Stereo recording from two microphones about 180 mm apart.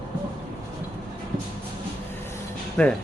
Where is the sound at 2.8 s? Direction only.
10° left (ahead or behind).